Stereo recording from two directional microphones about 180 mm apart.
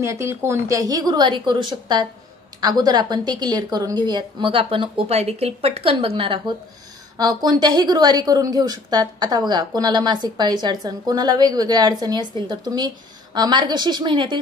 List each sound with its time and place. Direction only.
0.0 s a woman's voice: 15° right (ahead or behind)